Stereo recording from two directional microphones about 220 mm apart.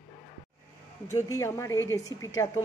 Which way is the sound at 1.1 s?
15° left (ahead or behind).